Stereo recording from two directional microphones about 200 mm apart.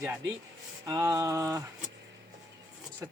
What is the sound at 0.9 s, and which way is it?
Speech, 15° right (ahead or behind).